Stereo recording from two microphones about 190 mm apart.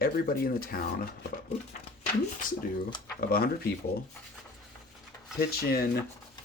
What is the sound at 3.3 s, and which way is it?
Speech, 55° left (ahead or behind).